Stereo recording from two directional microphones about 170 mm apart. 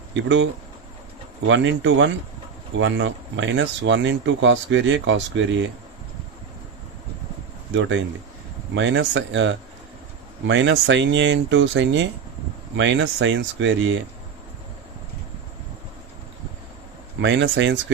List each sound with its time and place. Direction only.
0.1 s speech: 90° right
1.5 s speech: 90° right
7.8 s speech: 90° right
17.2 s speech: 90° right